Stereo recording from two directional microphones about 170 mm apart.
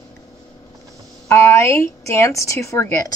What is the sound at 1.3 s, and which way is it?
A woman's voice, 15° left (ahead or behind).